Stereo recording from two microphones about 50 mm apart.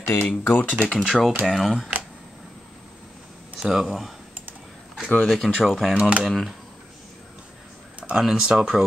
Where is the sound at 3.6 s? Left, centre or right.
Centre.